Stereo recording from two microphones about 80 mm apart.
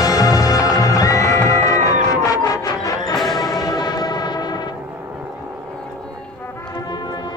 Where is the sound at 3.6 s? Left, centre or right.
Left.